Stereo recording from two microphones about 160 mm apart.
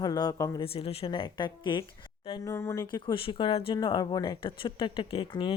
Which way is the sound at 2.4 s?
15° left (ahead or behind).